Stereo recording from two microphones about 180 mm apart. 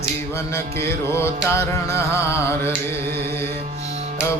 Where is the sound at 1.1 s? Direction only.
15° left (ahead or behind).